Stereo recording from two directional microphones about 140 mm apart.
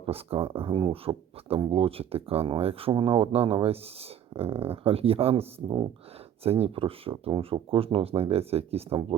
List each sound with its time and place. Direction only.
0.0 s speech: 40° right (ahead or behind)